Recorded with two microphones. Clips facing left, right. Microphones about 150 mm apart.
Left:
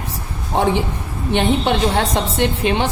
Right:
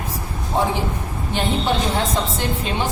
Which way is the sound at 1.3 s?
65° left (ahead or behind).